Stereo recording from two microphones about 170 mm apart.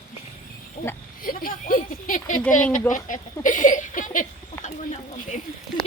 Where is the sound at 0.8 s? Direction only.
55° left (ahead or behind).